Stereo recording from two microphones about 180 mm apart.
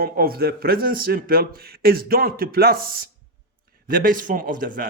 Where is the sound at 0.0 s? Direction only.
55° right (ahead or behind).